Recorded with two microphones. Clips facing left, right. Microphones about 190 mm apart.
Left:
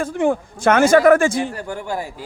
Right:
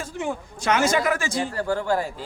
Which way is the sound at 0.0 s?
55° left (ahead or behind).